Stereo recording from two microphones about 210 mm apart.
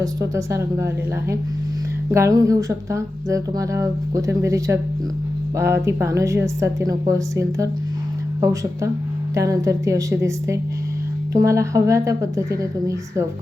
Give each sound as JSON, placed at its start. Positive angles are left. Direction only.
{"t": 0.0, "sound": "speech", "side_deg": -15}
{"t": 2.1, "sound": "speech", "side_deg": -15}
{"t": 9.3, "sound": "speech", "side_deg": -15}